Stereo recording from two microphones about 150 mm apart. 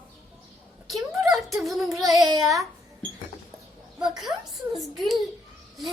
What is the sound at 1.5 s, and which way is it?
Child singing, centre (ahead or behind).